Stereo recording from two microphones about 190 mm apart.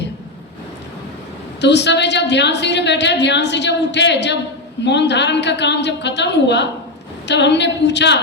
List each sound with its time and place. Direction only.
1.6 s a woman's voice: 65° left (ahead or behind)